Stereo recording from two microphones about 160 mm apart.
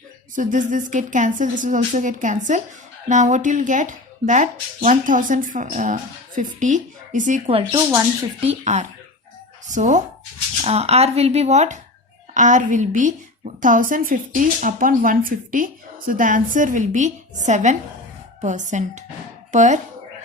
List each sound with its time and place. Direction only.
0.3 s a woman's voice: 55° right (ahead or behind)